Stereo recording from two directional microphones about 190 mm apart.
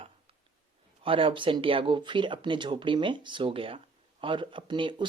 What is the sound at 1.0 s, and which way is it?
A man's voice, 30° right (ahead or behind).